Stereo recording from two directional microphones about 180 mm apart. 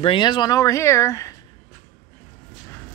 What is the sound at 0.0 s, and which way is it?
Speech, 25° left (ahead or behind).